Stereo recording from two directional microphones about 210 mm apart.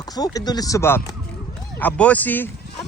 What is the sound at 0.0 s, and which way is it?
Speech, 20° left (ahead or behind).